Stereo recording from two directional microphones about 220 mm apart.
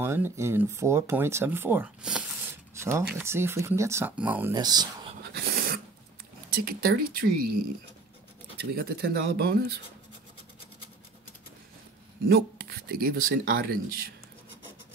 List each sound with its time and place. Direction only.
0.0 s speech: 10° right (ahead or behind)
5.2 s dog: 45° right (ahead or behind)
6.6 s speech: 45° right (ahead or behind)
8.7 s speech: 45° right (ahead or behind)
12.3 s speech: 45° right (ahead or behind)